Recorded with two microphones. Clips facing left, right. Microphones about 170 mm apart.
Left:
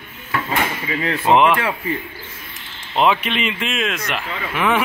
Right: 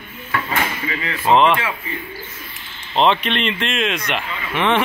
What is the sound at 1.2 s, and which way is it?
Speech, 15° left (ahead or behind).